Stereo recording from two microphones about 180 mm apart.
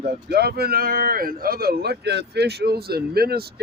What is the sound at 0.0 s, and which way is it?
Speech, 65° right (ahead or behind).